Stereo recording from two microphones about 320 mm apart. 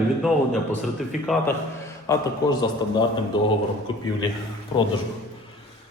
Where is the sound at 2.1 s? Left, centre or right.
Centre.